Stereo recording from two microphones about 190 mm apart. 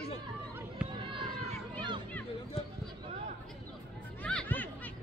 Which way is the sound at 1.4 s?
25° right (ahead or behind).